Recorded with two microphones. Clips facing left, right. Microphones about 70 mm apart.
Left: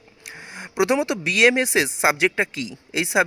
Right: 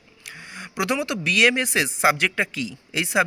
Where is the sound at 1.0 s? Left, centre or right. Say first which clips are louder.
Left 2 dB; centre.